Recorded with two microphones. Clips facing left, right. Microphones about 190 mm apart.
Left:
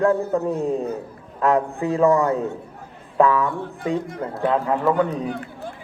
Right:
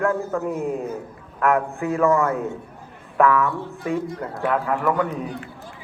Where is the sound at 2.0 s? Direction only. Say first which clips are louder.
Left 2 dB; 20° left (ahead or behind).